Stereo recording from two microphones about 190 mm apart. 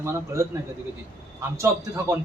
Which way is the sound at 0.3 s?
15° right (ahead or behind).